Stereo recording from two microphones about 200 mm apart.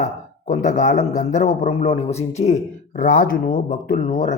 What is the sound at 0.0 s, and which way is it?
A man's voice, 40° left (ahead or behind).